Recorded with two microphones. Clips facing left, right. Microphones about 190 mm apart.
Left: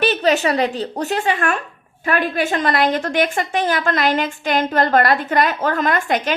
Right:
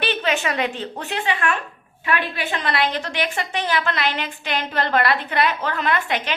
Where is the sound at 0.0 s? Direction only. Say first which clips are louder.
Left 6 dB; 40° left (ahead or behind).